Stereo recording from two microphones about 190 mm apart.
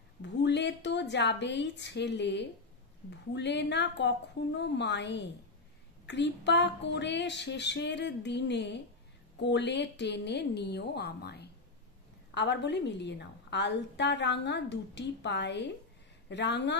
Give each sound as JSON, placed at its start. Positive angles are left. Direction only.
{"t": 0.2, "sound": "a woman's voice", "side_deg": 65}